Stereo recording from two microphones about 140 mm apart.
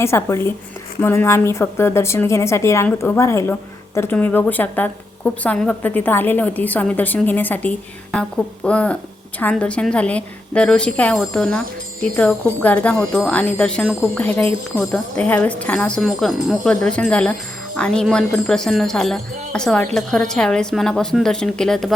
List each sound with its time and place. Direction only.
0.0 s a woman's voice: 20° left (ahead or behind); by 21.9 s centre (ahead or behind)